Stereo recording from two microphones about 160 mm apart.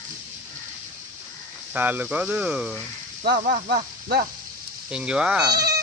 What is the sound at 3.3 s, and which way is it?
Speech, 55° right (ahead or behind).